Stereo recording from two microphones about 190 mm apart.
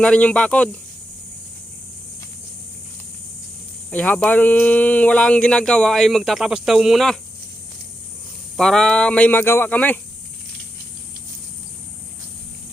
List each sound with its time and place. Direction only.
0.0 s speech: 5° left (ahead or behind)
3.9 s speech: 5° left (ahead or behind)
8.5 s speech: centre (ahead or behind)